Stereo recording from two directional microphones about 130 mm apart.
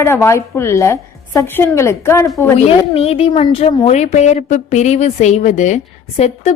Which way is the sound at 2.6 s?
50° left (ahead or behind).